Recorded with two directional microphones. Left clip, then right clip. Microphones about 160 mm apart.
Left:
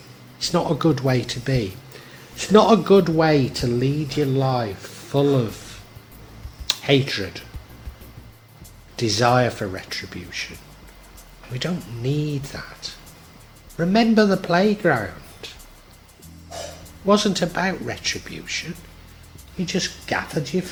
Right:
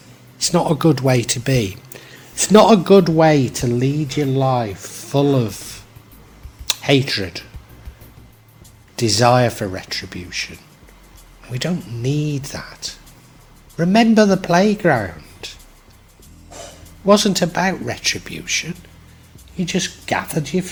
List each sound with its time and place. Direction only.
0.3 s speech: 40° right (ahead or behind)
9.0 s speech: 40° right (ahead or behind)
11.5 s speech: 40° right (ahead or behind)
17.1 s speech: 40° right (ahead or behind)